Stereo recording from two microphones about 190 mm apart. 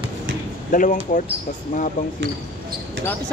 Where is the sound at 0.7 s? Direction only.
45° left (ahead or behind).